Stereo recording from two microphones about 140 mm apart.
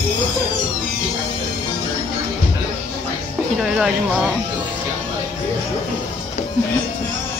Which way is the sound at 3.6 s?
5° right (ahead or behind).